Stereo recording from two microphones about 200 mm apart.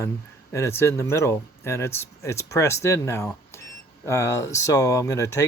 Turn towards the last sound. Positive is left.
turn(degrees=15)  # may be behind; listen again after turning